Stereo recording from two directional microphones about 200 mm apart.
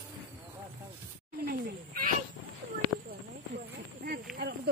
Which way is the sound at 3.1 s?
50° right (ahead or behind).